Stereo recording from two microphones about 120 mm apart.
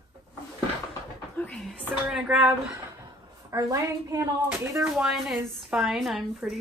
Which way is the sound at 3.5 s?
30° right (ahead or behind).